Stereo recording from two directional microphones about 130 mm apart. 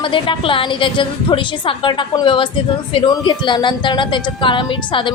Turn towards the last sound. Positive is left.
turn(degrees=40)  # may be behind; listen again after turning